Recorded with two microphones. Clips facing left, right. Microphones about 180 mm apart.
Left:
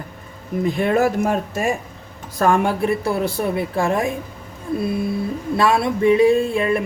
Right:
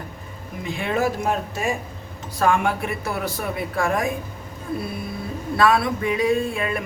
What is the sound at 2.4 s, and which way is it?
Speech, 35° left (ahead or behind).